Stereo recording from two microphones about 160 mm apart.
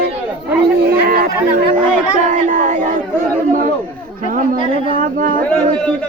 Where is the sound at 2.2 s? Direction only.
50° right (ahead or behind).